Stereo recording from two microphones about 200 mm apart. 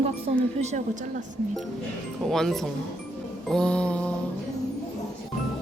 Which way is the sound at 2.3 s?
Centre (ahead or behind).